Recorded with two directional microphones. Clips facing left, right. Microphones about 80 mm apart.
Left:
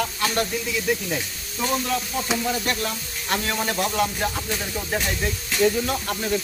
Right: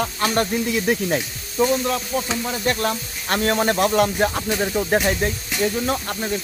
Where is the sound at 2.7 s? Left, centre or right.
Right.